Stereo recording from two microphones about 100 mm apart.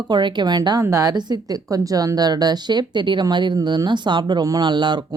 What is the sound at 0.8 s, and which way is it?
Speech, 30° right (ahead or behind).